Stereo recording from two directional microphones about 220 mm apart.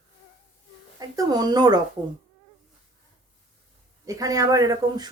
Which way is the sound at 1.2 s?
15° right (ahead or behind).